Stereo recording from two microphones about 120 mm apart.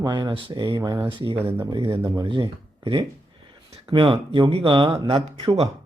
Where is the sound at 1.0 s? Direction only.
45° right (ahead or behind).